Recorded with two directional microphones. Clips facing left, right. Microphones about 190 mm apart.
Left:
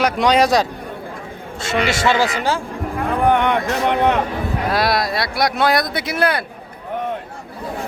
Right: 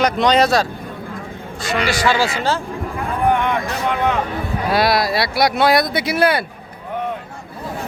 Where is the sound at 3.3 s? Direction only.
65° left (ahead or behind).